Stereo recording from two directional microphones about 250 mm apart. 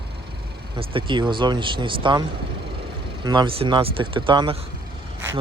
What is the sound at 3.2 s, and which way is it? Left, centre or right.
Speech, centre.